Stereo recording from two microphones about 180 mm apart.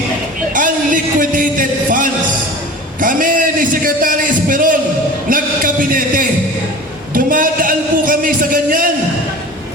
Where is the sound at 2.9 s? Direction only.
50° right (ahead or behind).